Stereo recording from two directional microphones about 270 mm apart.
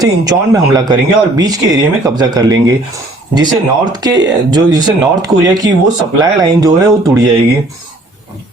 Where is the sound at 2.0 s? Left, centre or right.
Centre.